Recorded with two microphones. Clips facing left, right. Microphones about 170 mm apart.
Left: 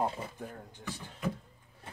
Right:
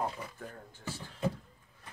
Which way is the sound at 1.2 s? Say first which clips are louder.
Right 2 dB; 30° right (ahead or behind).